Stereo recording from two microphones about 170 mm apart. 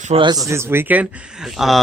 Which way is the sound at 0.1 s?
35° right (ahead or behind).